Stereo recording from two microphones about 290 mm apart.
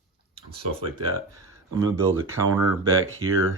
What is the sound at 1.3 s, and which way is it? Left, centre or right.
Speech, centre.